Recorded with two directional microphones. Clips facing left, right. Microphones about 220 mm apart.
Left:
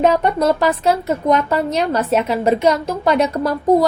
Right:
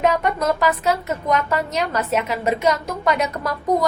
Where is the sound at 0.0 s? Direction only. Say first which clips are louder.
Left 5 dB; 30° left (ahead or behind).